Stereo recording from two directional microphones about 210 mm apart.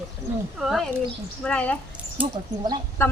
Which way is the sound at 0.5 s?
Centre (ahead or behind).